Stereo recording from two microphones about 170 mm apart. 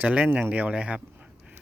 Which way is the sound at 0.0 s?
10° right (ahead or behind).